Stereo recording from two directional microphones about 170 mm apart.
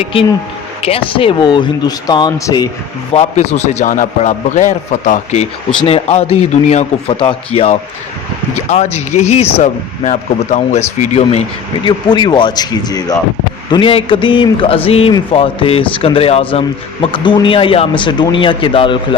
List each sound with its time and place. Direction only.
0.0 s a man's voice: 30° left (ahead or behind)
3.2 s a man's voice: 40° left (ahead or behind)
11.9 s a man's voice: 25° left (ahead or behind)